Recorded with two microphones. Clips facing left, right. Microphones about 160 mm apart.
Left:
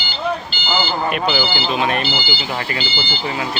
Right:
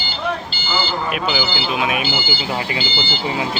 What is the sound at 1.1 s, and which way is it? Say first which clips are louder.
Speech: left 2 dB; centre (ahead or behind).